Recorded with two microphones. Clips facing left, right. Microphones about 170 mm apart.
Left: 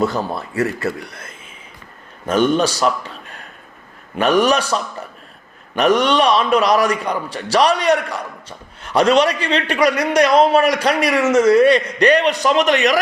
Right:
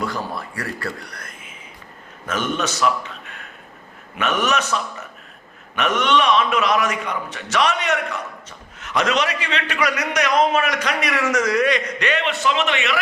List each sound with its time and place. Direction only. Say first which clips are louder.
0.0 s a man's voice: left 6 dB; 25° left (ahead or behind); by 13.0 s 40° left (ahead or behind)